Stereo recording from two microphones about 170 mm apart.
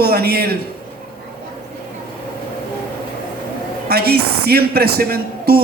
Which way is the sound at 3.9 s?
65° right (ahead or behind).